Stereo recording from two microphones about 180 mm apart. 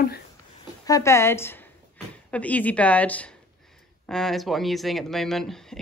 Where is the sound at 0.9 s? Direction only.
15° left (ahead or behind).